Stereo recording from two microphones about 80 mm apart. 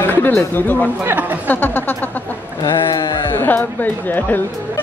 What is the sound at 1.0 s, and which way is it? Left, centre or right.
Chatter, right.